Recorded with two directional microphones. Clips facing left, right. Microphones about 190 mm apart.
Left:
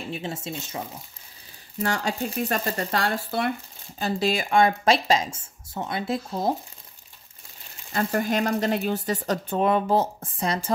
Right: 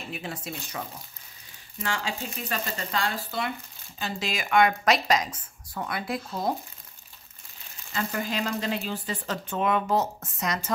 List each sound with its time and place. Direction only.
0.1 s a woman's voice: 25° left (ahead or behind)
1.8 s speech: 40° left (ahead or behind)
4.0 s a woman's voice: 35° left (ahead or behind)
7.9 s speech: 45° left (ahead or behind); by 10.7 s 30° left (ahead or behind)